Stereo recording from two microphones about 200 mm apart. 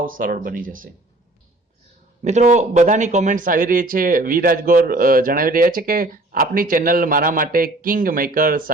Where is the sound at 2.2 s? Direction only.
35° right (ahead or behind).